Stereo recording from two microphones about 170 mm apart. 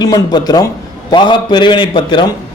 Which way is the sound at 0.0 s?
25° left (ahead or behind).